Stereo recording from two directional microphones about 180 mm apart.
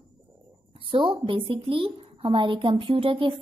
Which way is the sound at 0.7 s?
30° right (ahead or behind).